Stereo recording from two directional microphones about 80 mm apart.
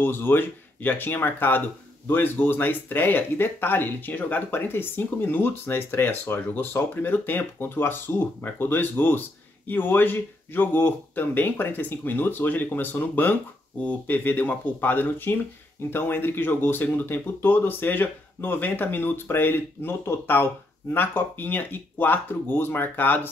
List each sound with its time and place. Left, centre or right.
0.0 s speech: left